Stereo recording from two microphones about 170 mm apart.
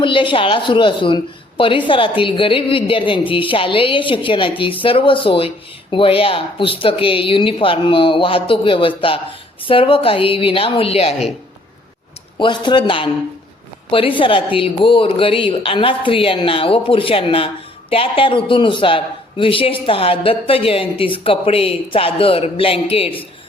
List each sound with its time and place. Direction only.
0.0 s a woman's voice: 30° left (ahead or behind)
12.4 s a woman's voice: 25° left (ahead or behind)